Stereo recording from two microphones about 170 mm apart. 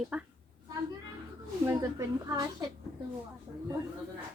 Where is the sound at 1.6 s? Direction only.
15° right (ahead or behind).